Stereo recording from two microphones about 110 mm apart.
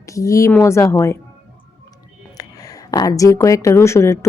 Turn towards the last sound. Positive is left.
turn(degrees=25)  # may be behind; listen again after turning